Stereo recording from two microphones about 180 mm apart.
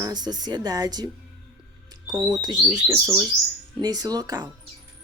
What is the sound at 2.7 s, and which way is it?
Speech, 10° right (ahead or behind).